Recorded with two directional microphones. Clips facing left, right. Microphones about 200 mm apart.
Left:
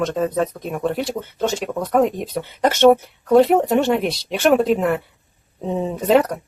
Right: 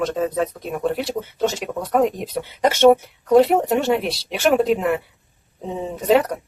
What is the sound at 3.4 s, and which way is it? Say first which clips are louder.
Speech: left 2 dB; 5° right (ahead or behind).